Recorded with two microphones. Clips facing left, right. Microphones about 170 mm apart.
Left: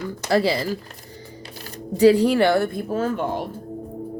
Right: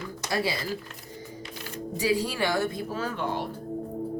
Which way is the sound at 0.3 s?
70° left (ahead or behind).